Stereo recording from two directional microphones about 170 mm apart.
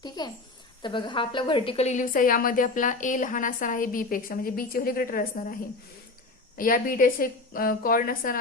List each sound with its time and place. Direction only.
0.2 s a child's voice: 25° left (ahead or behind); by 5.5 s 55° left (ahead or behind)
6.6 s a woman's voice: 55° left (ahead or behind)